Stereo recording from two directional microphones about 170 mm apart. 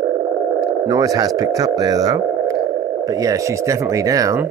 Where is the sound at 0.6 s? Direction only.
20° right (ahead or behind).